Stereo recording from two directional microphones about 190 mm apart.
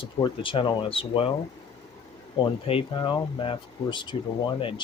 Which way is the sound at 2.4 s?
25° left (ahead or behind).